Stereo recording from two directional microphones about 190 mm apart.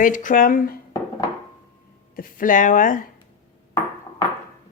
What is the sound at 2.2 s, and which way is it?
Speech, 45° left (ahead or behind).